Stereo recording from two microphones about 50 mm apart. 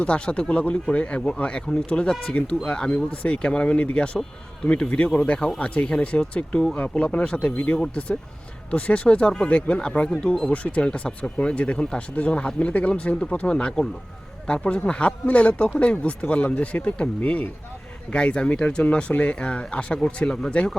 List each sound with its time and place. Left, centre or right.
0.0 s speech: left
10.5 s speech: left